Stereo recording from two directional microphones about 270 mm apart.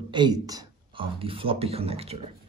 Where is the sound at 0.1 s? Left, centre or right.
Centre.